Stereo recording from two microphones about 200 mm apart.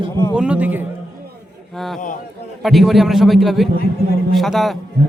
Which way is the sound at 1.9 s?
40° left (ahead or behind).